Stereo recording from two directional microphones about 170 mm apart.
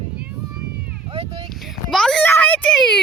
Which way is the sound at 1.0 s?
35° right (ahead or behind).